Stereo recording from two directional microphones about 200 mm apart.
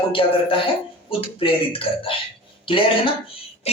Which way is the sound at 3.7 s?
30° left (ahead or behind).